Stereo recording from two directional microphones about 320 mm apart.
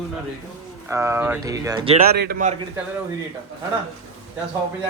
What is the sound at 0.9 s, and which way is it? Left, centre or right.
A man's voice, centre.